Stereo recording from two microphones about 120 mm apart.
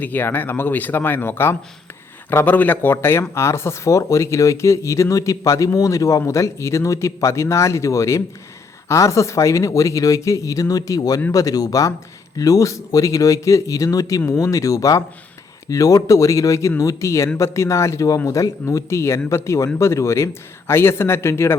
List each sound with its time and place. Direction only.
0.0 s speech: 15° left (ahead or behind)